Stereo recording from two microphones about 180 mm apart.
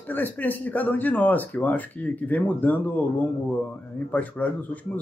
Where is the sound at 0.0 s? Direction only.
10° left (ahead or behind).